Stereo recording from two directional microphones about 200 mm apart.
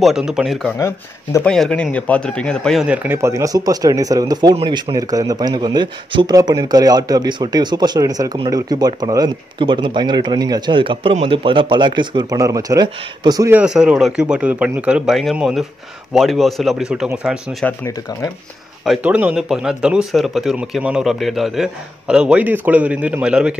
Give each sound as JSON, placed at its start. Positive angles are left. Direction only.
{"t": 0.0, "sound": "speech", "side_deg": -5}
{"t": 0.7, "sound": "speech", "side_deg": 15}
{"t": 1.5, "sound": "speech", "side_deg": 5}
{"t": 13.6, "sound": "speech", "side_deg": -5}
{"t": 17.6, "sound": "speech", "side_deg": 15}
{"t": 18.9, "sound": "speech", "side_deg": -5}